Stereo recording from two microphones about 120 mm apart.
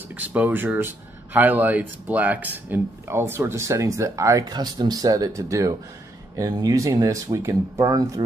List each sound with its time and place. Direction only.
0.1 s speech: 15° right (ahead or behind)